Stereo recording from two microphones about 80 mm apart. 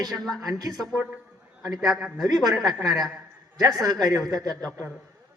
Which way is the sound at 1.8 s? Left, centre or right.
Centre.